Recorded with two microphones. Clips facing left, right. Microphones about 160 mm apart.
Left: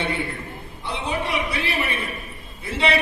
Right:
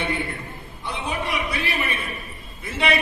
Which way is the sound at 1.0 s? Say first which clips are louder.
Left 2 dB; 30° left (ahead or behind).